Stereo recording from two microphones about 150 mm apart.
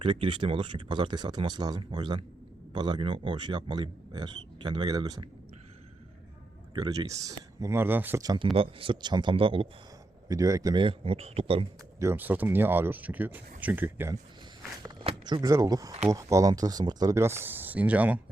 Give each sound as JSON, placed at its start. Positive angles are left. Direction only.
{"t": 0.0, "sound": "speech", "side_deg": -35}
{"t": 6.7, "sound": "speech", "side_deg": -25}
{"t": 8.2, "sound": "speech", "side_deg": -25}
{"t": 8.5, "sound": "speech", "side_deg": -35}
{"t": 10.2, "sound": "speech", "side_deg": -20}
{"t": 10.8, "sound": "speech", "side_deg": -40}
{"t": 11.9, "sound": "speech", "side_deg": -15}
{"t": 14.8, "sound": "speech", "side_deg": -30}